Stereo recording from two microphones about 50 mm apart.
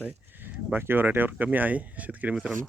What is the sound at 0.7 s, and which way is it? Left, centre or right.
Speech, right.